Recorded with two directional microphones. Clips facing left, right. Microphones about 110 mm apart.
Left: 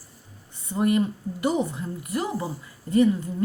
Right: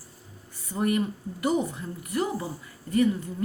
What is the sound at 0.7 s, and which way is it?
Speech, 30° left (ahead or behind).